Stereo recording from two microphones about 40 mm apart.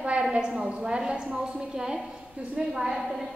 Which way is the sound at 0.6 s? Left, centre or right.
Right.